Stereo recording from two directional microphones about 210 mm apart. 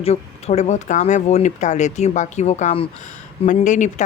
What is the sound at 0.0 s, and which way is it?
Speech, 30° left (ahead or behind).